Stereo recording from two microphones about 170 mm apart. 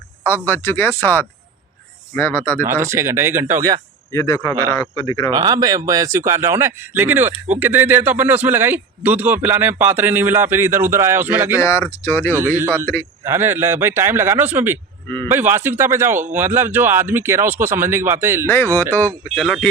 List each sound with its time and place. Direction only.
0.4 s speech: 10° left (ahead or behind)
2.6 s speech: 15° right (ahead or behind)
4.1 s a man's voice: 15° left (ahead or behind)
5.3 s speech: 20° right (ahead or behind)
11.6 s speech: 15° left (ahead or behind)
12.5 s speech: 15° right (ahead or behind)
12.8 s speech: 10° left (ahead or behind)
13.2 s speech: 15° right (ahead or behind)
18.4 s speech: 10° left (ahead or behind)